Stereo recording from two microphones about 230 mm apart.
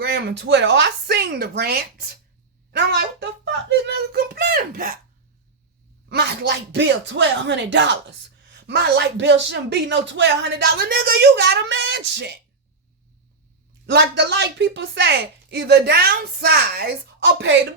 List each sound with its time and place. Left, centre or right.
0.0 s speech: right
6.1 s speech: right
13.8 s speech: right